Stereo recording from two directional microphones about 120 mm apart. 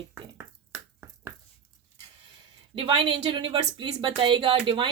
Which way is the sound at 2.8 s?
45° right (ahead or behind).